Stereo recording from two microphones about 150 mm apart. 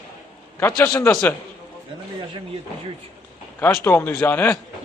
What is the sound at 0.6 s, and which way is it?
Speech, 15° left (ahead or behind).